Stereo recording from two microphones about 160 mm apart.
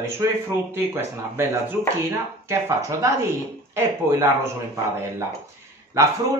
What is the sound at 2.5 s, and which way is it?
Speech, 20° right (ahead or behind).